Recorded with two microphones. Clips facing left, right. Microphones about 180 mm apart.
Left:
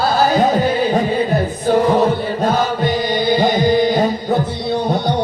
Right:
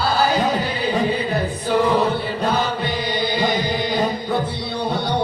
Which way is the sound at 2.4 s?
45° left (ahead or behind).